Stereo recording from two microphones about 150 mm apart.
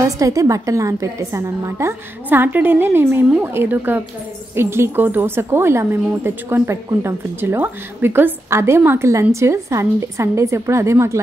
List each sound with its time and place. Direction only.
0.0 s a woman's voice: 20° right (ahead or behind)